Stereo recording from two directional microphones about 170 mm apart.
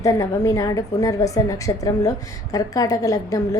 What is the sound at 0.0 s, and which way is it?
A woman's voice, 20° left (ahead or behind).